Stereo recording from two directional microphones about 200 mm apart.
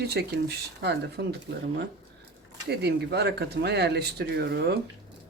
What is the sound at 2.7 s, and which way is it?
Speech, 55° right (ahead or behind).